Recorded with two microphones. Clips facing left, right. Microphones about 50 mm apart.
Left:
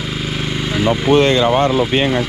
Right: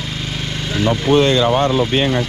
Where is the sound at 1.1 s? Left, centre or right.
Left.